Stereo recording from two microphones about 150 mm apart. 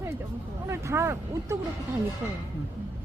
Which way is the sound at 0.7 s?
15° right (ahead or behind).